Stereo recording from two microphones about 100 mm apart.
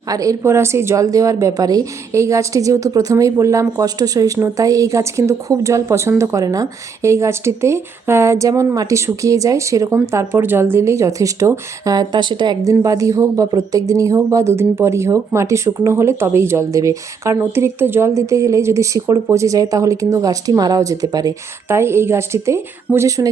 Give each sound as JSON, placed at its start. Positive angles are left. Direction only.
{"t": 0.1, "sound": "a woman's voice", "side_deg": -35}
{"t": 12.8, "sound": "a woman's voice", "side_deg": -35}
{"t": 21.7, "sound": "speech", "side_deg": -25}